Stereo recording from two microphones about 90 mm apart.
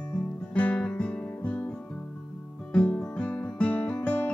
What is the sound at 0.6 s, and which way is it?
Guitar, 15° left (ahead or behind).